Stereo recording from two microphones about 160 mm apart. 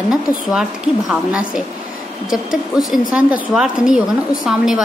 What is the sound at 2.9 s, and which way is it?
A woman's voice, 5° right (ahead or behind).